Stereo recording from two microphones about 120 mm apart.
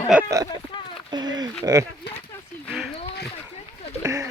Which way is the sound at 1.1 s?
35° right (ahead or behind).